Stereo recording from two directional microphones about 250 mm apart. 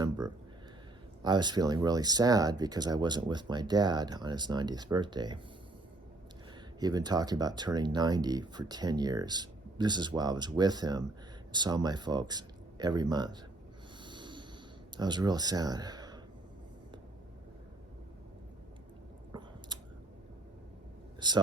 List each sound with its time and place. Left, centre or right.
1.2 s speech: centre
6.7 s speech: centre
14.0 s snort: centre
14.9 s speech: centre
19.3 s chewing: centre
21.2 s speech: centre